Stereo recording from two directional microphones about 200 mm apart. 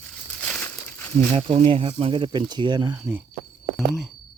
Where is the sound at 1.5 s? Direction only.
25° right (ahead or behind).